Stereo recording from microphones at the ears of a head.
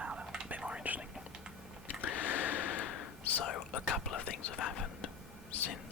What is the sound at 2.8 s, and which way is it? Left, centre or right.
Whispering, left.